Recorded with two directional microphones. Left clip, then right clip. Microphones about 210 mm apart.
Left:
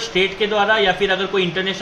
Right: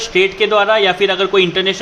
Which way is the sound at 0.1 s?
45° right (ahead or behind).